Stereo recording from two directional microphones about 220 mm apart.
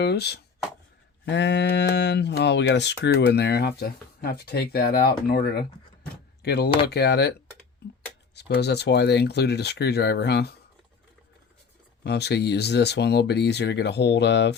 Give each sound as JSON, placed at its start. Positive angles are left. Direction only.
{"t": 0.0, "sound": "speech", "side_deg": 50}
{"t": 7.8, "sound": "a sound", "side_deg": 45}
{"t": 8.4, "sound": "speech", "side_deg": 50}
{"t": 12.0, "sound": "speech", "side_deg": 50}